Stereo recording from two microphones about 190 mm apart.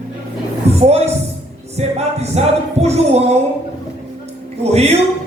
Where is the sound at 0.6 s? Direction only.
35° right (ahead or behind).